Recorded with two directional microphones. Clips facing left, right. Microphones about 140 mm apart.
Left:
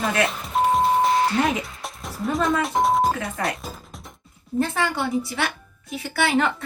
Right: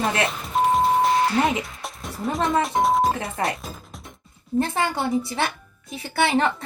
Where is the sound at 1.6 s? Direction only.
Centre (ahead or behind).